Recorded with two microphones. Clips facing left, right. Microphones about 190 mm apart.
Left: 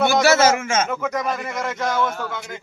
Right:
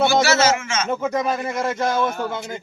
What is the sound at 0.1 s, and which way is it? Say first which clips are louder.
Speech: left 2 dB; 50° left (ahead or behind).